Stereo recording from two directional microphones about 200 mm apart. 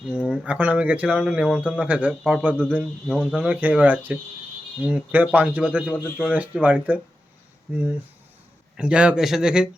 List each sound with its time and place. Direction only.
0.2 s speech: 5° right (ahead or behind)
8.7 s speech: 5° right (ahead or behind)